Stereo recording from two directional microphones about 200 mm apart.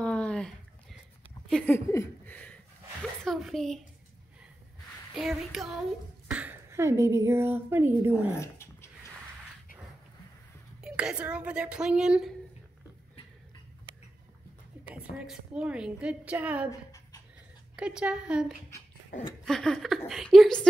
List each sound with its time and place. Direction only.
0.0 s a sound: 5° left (ahead or behind)
1.5 s speech: 10° left (ahead or behind)
5.3 s a child's voice: centre (ahead or behind)
8.4 s dog: 15° left (ahead or behind)
10.8 s a woman's voice: 5° right (ahead or behind)
15.0 s a woman's voice: 5° right (ahead or behind)
17.7 s a woman's voice: 5° right (ahead or behind)
19.4 s a sound: centre (ahead or behind)
20.1 s a woman's voice: centre (ahead or behind)